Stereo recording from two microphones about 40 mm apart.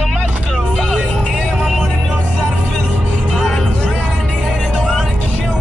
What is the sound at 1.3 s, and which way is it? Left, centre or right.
Music, centre.